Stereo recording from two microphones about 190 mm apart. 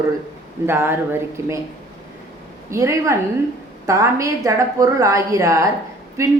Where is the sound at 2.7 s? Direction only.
15° right (ahead or behind).